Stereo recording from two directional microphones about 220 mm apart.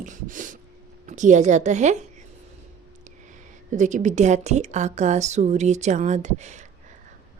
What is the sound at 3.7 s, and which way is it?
Speech, 35° right (ahead or behind).